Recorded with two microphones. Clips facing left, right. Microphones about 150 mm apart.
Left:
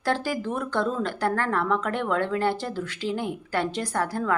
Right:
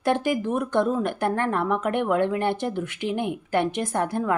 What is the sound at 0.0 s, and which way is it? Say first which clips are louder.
Speech: right 3 dB; 20° right (ahead or behind).